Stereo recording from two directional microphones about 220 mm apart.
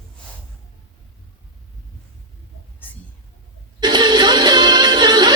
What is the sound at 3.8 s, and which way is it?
Music, 20° right (ahead or behind).